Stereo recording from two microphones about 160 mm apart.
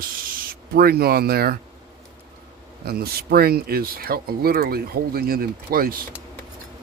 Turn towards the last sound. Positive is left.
turn(degrees=-65)  # may be behind; listen again after turning